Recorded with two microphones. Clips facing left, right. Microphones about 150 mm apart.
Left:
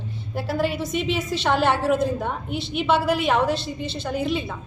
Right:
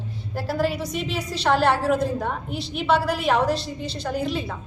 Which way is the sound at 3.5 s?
35° right (ahead or behind).